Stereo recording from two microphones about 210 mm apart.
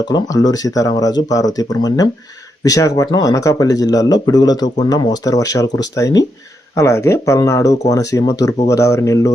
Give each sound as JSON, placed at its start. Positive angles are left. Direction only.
{"t": 0.0, "sound": "speech", "side_deg": 15}